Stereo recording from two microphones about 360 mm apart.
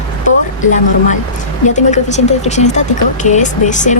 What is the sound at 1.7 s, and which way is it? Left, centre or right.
Speech, centre.